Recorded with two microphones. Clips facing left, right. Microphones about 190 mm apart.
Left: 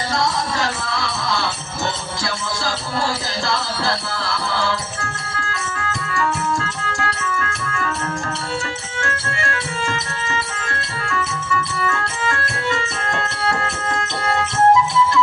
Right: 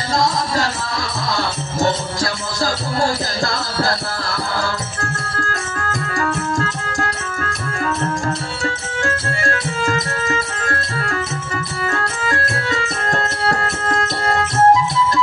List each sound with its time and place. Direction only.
0.1 s music: 35° right (ahead or behind)
5.4 s organ: 45° right (ahead or behind)
9.4 s music: 40° right (ahead or behind)